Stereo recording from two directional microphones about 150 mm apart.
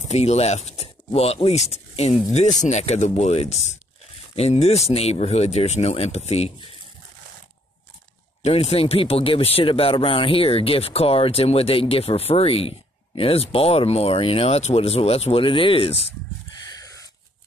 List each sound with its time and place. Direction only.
0.1 s speech: 45° left (ahead or behind)
8.4 s speech: 45° left (ahead or behind)
16.6 s a sound: 25° left (ahead or behind)